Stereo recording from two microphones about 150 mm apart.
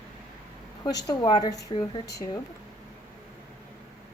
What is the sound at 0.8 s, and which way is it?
A woman's voice, 25° left (ahead or behind).